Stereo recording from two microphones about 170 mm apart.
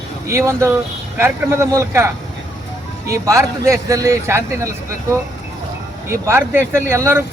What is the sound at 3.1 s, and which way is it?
Speech, 20° right (ahead or behind).